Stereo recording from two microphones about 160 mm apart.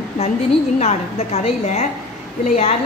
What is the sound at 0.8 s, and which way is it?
A woman's voice, 45° left (ahead or behind).